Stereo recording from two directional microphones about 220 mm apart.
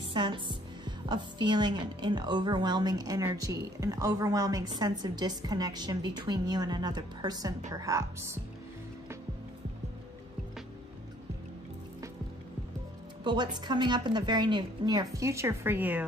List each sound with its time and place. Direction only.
0.1 s a woman's voice: 20° right (ahead or behind)
13.2 s a woman's voice: 20° right (ahead or behind)